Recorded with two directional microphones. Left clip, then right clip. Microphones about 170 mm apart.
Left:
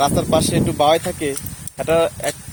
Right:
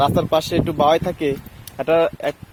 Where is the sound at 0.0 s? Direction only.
25° right (ahead or behind).